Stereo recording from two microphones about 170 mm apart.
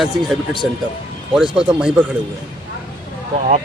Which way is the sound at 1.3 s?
5° right (ahead or behind).